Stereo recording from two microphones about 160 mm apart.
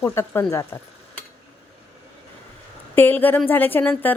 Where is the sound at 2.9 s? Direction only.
10° left (ahead or behind).